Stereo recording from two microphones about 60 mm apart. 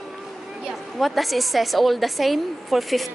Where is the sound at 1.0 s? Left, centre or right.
Centre.